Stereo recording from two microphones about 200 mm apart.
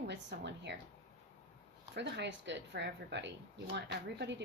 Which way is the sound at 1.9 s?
60° right (ahead or behind).